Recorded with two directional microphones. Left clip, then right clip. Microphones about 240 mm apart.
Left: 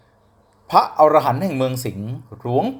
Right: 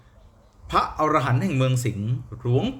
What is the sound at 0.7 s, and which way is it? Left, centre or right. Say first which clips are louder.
Speech: left 8 dB; centre.